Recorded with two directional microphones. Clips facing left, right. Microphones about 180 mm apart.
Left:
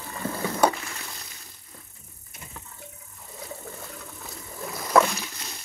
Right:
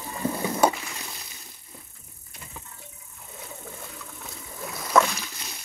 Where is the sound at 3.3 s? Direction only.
Centre (ahead or behind).